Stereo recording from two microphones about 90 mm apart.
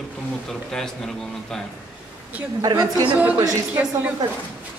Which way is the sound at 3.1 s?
15° right (ahead or behind).